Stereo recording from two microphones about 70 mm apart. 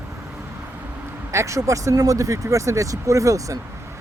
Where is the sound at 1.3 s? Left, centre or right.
Right.